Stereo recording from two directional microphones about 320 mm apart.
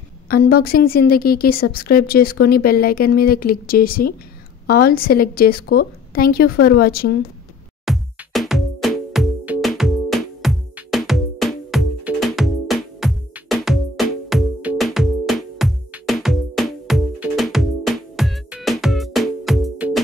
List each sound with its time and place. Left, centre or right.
0.3 s a woman's voice: left
7.8 s music: centre